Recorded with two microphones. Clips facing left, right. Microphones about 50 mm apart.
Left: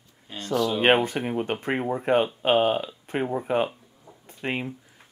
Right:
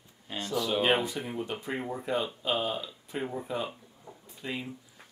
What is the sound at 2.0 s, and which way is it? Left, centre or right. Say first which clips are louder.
Speech: left 10 dB; left.